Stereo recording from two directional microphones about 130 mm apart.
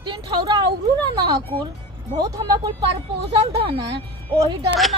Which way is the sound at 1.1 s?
35° right (ahead or behind).